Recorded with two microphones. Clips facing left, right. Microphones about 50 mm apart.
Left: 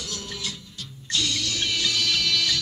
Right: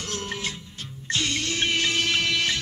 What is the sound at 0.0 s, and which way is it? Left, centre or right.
Music, right.